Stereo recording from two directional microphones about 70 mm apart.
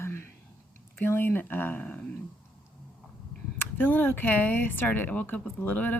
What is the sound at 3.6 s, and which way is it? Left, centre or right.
Speech, left.